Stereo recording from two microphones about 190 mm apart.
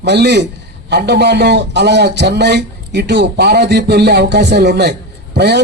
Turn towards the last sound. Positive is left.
turn(degrees=-60)  # may be behind; listen again after turning